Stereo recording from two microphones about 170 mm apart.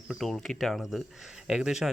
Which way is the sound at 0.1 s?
Centre (ahead or behind).